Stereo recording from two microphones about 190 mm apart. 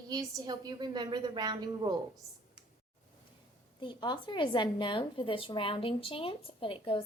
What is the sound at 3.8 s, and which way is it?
Speech, 25° left (ahead or behind).